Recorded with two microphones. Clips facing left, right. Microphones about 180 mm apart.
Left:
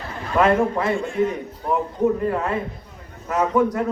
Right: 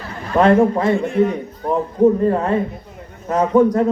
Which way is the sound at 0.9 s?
20° right (ahead or behind).